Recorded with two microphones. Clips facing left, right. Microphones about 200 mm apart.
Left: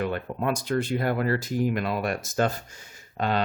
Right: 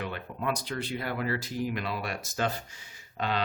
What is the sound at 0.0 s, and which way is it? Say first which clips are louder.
Speech: left 6 dB; 45° left (ahead or behind).